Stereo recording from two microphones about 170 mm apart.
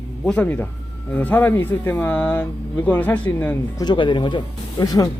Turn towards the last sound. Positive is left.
turn(degrees=20)  # may be behind; listen again after turning